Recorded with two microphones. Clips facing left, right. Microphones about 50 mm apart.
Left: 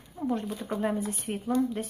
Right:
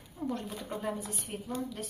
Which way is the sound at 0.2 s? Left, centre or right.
Centre.